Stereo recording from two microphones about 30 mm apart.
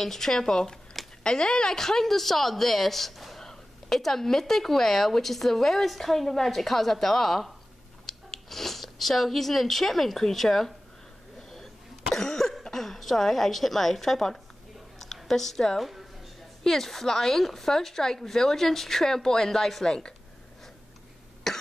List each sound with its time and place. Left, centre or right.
0.0 s a woman's voice: centre
12.6 s a woman's voice: centre
19.9 s a woman's voice: left
21.5 s cough: centre